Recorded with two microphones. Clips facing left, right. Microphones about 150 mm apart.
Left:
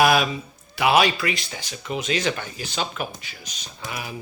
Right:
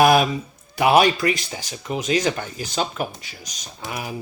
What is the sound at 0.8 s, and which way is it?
Speech, 45° right (ahead or behind).